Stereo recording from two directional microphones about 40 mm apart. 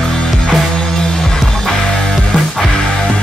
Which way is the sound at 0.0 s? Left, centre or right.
Centre.